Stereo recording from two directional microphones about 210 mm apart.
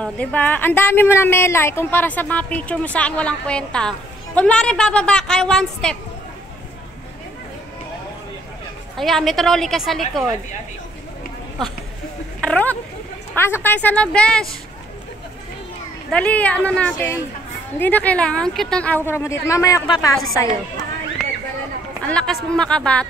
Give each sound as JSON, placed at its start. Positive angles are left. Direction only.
{"t": 0.0, "sound": "a woman's voice", "side_deg": 5}
{"t": 8.9, "sound": "a woman's voice", "side_deg": 0}
{"t": 12.4, "sound": "a woman's voice", "side_deg": 5}
{"t": 16.1, "sound": "a woman's voice", "side_deg": 5}
{"t": 22.0, "sound": "a woman's voice", "side_deg": 5}